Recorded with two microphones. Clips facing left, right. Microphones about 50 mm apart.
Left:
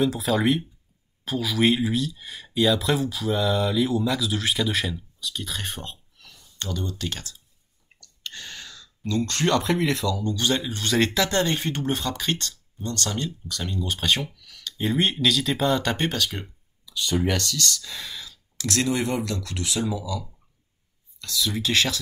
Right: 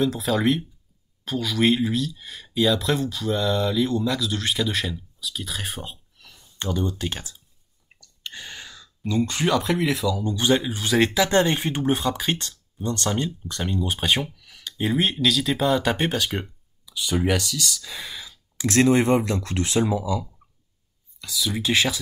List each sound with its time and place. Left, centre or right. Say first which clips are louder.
0.0 s speech: even; centre
5.2 s a sound: even; centre
6.6 s speech: right 4 dB; right; by 10.2 s centre
10.2 s speech: right 3 dB; centre
18.8 s speech: right 7 dB; right
21.2 s speech: even; centre